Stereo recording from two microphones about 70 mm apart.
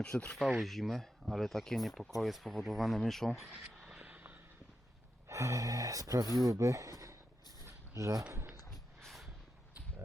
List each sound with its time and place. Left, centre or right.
0.2 s speech: centre
0.6 s speech: centre
4.0 s vehicle: right
5.3 s speech: right
7.6 s a sound: right
9.0 s a sound: centre